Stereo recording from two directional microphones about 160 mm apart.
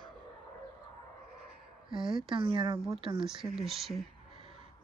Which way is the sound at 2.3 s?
35° right (ahead or behind).